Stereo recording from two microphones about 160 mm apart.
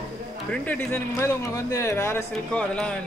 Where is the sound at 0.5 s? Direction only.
10° left (ahead or behind).